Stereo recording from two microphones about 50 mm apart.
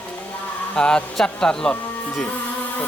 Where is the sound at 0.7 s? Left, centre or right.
Centre.